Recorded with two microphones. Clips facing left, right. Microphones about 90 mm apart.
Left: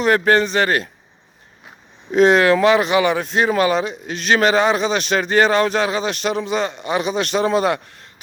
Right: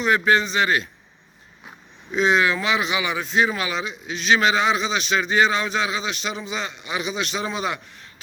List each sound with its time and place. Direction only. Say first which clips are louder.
0.0 s speech: left 4 dB; 55° left (ahead or behind)
2.1 s speech: left 7 dB; 60° left (ahead or behind)